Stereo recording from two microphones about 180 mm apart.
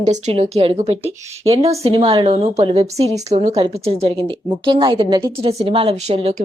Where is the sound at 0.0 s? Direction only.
40° right (ahead or behind).